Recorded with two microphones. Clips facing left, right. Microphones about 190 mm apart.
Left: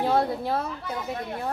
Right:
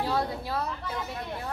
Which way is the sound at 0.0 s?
50° left (ahead or behind).